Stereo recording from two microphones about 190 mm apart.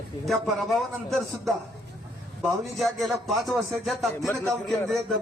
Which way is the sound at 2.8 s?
Centre (ahead or behind).